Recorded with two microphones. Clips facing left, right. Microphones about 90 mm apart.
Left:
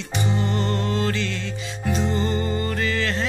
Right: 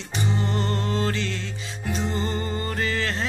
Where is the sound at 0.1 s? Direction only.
35° right (ahead or behind).